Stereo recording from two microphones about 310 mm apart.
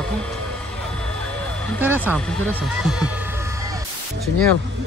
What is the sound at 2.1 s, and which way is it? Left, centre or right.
Speech, centre.